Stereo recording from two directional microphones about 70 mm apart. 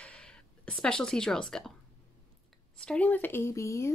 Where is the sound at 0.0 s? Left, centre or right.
Centre.